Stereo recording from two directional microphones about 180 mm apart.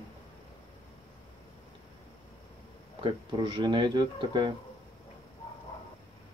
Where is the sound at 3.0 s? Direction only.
25° right (ahead or behind).